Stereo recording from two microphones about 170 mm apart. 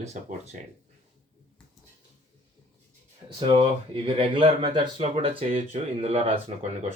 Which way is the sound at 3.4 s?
30° right (ahead or behind).